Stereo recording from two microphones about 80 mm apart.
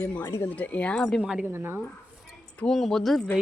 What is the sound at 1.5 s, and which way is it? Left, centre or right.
Speech, right.